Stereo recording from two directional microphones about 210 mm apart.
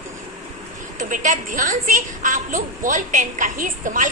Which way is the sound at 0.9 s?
40° right (ahead or behind).